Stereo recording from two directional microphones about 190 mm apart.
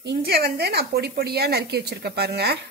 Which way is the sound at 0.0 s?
55° right (ahead or behind).